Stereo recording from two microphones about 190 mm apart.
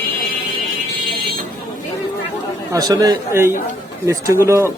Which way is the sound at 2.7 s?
20° right (ahead or behind).